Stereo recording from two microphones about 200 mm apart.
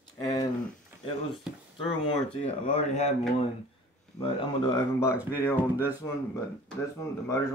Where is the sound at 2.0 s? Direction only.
30° left (ahead or behind).